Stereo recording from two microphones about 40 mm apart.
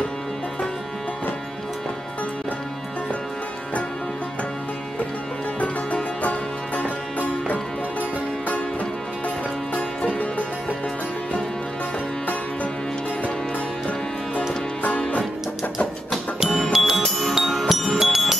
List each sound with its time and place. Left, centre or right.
5.6 s music: left
9.8 s music: left
14.8 s music: left
16.5 s music: centre